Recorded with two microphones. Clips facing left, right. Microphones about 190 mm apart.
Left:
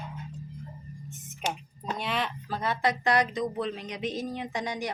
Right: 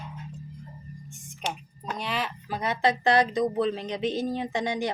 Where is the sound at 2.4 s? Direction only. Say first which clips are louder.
Right 4 dB; 15° right (ahead or behind).